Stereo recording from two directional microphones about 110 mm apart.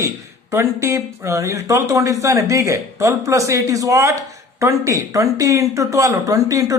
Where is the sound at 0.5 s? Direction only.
25° right (ahead or behind).